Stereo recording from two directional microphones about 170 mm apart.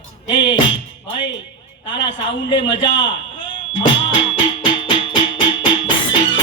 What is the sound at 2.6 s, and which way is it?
Speech, 30° left (ahead or behind).